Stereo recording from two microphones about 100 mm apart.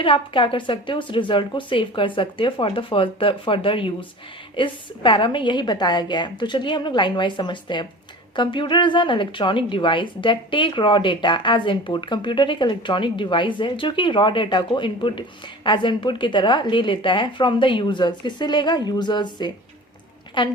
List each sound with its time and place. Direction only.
0.0 s a woman's voice: 60° left (ahead or behind)